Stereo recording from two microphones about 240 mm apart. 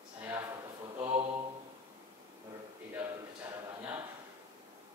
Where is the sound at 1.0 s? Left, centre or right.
Right.